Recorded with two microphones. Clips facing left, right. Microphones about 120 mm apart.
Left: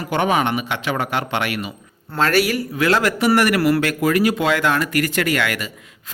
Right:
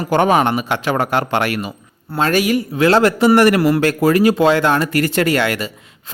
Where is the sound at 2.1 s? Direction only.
20° right (ahead or behind).